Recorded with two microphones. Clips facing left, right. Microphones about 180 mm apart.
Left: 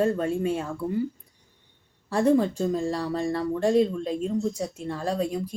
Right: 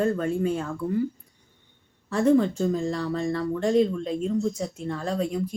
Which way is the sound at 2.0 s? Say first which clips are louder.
Right 1 dB; 30° left (ahead or behind).